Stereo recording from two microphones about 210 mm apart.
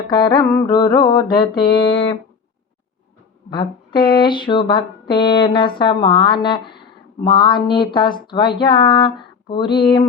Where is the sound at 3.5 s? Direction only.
20° left (ahead or behind).